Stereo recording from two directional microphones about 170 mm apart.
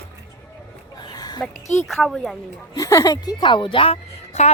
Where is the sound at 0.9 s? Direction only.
25° left (ahead or behind).